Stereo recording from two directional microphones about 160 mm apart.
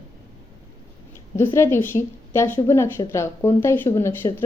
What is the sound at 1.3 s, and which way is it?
A woman's voice, 15° left (ahead or behind).